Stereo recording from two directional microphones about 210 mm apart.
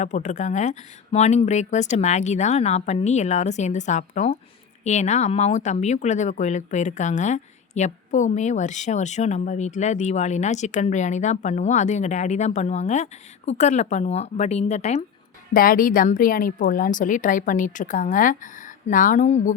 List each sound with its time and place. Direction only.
0.0 s speech: 35° left (ahead or behind)